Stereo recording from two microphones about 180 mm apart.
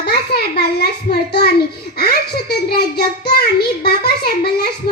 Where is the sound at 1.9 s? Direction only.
60° left (ahead or behind).